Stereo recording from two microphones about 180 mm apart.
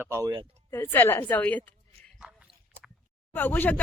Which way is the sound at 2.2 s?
5° right (ahead or behind).